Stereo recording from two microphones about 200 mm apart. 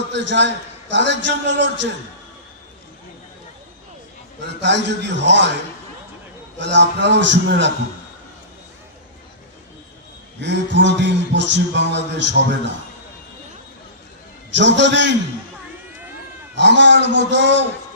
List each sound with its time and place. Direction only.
0.1 s music: 60° right (ahead or behind)
4.6 s music: 60° right (ahead or behind)
6.6 s music: 60° right (ahead or behind)
10.4 s music: 60° right (ahead or behind)
14.5 s music: 60° right (ahead or behind)
16.6 s music: 60° right (ahead or behind)